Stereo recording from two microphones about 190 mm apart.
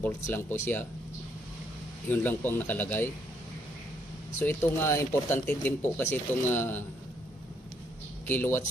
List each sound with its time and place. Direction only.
0.0 s speech: 10° left (ahead or behind)
2.0 s speech: 10° left (ahead or behind)
4.4 s speech: 10° left (ahead or behind)
8.3 s speech: 10° left (ahead or behind)